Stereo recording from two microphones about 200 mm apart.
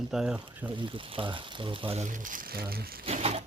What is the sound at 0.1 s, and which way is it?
Speech, 5° right (ahead or behind).